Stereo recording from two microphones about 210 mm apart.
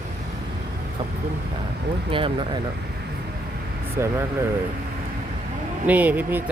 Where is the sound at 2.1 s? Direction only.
25° right (ahead or behind).